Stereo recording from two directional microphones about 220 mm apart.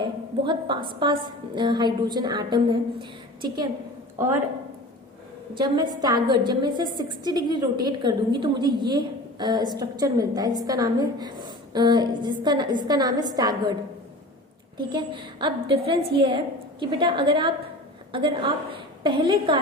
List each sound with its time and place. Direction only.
0.0 s a woman's voice: 20° right (ahead or behind)
5.5 s a woman's voice: 20° right (ahead or behind)
14.8 s a woman's voice: 20° right (ahead or behind)